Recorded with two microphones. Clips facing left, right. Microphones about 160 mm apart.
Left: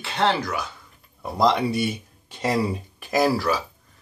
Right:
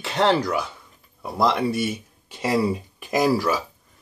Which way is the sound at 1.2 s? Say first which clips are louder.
Left 1 dB; 5° right (ahead or behind).